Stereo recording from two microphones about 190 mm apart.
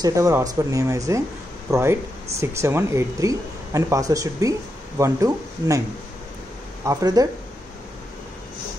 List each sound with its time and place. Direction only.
0.0 s speech: 15° right (ahead or behind)
6.8 s speech: 15° right (ahead or behind)